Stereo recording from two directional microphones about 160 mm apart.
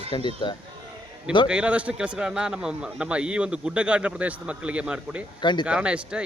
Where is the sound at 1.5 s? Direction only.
5° right (ahead or behind).